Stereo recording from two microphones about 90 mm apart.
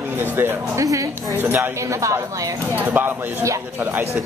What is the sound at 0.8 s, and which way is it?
Speech, 40° right (ahead or behind).